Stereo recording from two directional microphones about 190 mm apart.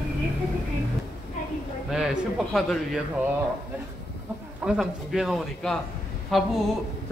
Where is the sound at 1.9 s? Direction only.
5° right (ahead or behind).